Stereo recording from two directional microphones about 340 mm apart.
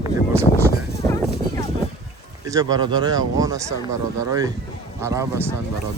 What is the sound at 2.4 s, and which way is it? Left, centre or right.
Speech, centre.